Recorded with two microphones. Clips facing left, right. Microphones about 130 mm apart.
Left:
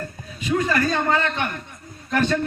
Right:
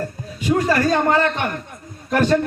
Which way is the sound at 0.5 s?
40° right (ahead or behind).